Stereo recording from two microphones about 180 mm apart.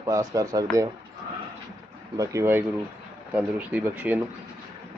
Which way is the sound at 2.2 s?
15° right (ahead or behind).